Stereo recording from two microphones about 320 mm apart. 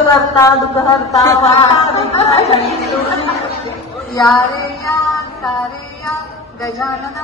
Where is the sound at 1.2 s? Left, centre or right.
Centre.